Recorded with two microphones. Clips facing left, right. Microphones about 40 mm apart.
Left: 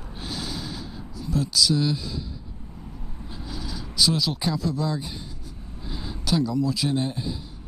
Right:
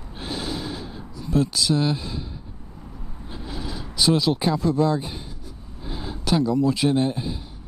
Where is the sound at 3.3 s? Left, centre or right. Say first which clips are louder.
Right 3 dB; right.